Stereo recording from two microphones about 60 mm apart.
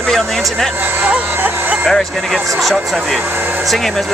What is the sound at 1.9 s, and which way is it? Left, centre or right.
Speech, centre.